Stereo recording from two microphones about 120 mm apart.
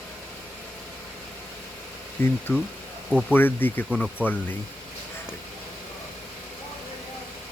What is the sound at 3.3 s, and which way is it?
Speech, 15° left (ahead or behind).